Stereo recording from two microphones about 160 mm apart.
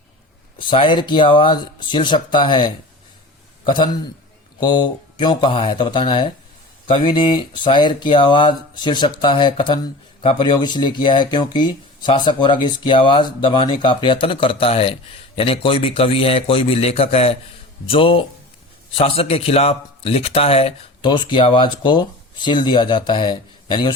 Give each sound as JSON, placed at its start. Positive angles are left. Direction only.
{"t": 0.6, "sound": "a man's voice", "side_deg": 30}